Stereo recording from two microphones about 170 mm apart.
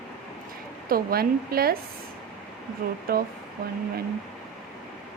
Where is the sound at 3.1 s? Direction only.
65° right (ahead or behind).